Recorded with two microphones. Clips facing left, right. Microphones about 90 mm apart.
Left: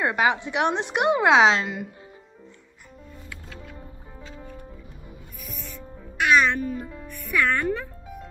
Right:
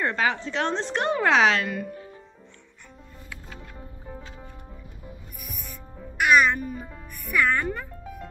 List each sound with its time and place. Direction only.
0.0 s a woman's voice: 15° left (ahead or behind)
5.4 s music: 15° right (ahead or behind)